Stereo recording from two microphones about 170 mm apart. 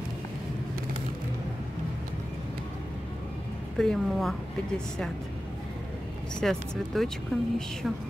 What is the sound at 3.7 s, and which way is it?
Speech, 5° left (ahead or behind).